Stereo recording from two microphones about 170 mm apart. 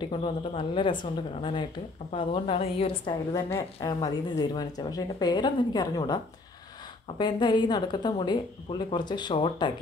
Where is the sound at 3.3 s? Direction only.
15° left (ahead or behind).